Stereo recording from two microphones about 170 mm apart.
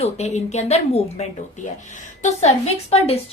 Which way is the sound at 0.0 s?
40° left (ahead or behind).